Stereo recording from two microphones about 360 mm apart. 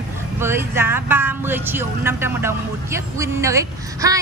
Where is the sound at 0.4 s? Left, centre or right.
Centre.